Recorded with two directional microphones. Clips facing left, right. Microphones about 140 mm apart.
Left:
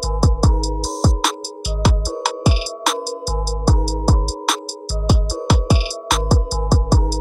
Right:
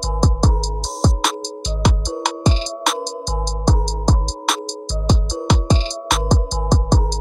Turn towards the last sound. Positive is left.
turn(degrees=5)  # may be behind; listen again after turning